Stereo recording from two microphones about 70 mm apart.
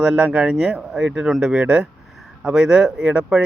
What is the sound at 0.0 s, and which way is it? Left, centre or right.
Speech, centre.